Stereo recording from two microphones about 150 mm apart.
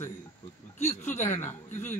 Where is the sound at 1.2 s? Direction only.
15° left (ahead or behind).